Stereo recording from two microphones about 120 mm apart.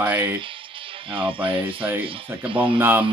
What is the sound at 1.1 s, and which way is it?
Speech, 45° right (ahead or behind).